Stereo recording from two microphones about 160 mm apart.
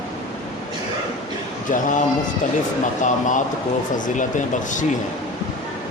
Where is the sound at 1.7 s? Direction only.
50° left (ahead or behind).